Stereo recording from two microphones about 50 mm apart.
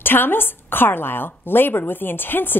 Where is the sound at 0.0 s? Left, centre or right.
Left.